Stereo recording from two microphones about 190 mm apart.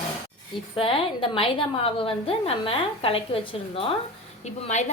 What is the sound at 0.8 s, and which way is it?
A woman's voice, 30° left (ahead or behind).